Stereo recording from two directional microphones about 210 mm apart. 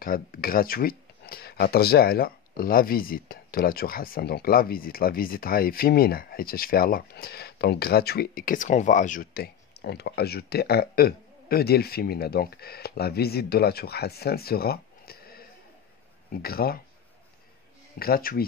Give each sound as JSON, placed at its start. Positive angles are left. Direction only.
{"t": 0.0, "sound": "speech", "side_deg": 45}
{"t": 16.4, "sound": "speech", "side_deg": 45}
{"t": 17.9, "sound": "speech", "side_deg": 45}